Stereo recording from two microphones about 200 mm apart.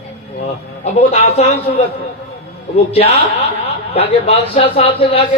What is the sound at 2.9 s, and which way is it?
A man's voice, 30° left (ahead or behind).